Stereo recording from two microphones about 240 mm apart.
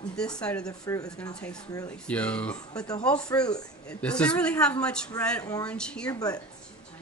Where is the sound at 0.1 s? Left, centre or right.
Centre.